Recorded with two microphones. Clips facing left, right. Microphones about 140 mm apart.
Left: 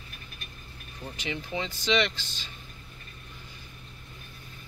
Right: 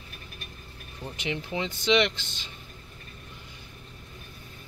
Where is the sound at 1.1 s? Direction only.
20° right (ahead or behind).